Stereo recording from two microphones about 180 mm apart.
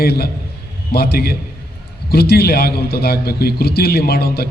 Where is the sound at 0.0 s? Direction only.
60° left (ahead or behind).